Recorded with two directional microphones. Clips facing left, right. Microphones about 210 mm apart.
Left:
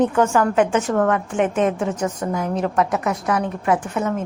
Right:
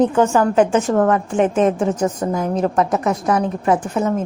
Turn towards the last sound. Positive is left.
turn(degrees=-30)  # may be behind; listen again after turning